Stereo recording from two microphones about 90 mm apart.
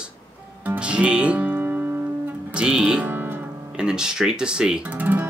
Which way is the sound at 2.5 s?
10° right (ahead or behind).